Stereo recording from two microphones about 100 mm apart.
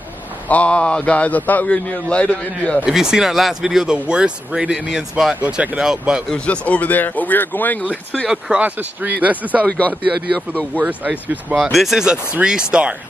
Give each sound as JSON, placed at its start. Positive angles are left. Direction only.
{"t": 0.5, "sound": "a man's voice", "side_deg": 15}
{"t": 2.8, "sound": "speech", "side_deg": -5}
{"t": 6.2, "sound": "a man's voice", "side_deg": 10}
{"t": 8.3, "sound": "speech", "side_deg": -10}
{"t": 9.6, "sound": "a man's voice", "side_deg": 15}
{"t": 10.7, "sound": "speech", "side_deg": -15}
{"t": 11.6, "sound": "speech", "side_deg": 0}